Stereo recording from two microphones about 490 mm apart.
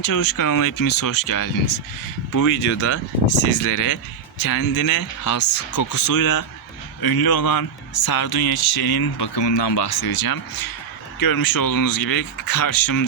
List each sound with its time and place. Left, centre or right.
0.0 s speech: left